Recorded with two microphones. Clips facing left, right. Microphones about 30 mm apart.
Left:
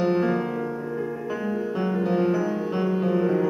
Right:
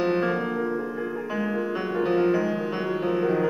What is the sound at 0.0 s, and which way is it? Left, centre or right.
Music, centre.